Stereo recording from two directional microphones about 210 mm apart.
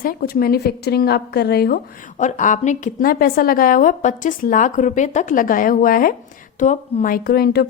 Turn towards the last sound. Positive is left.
turn(degrees=50)  # may be behind; listen again after turning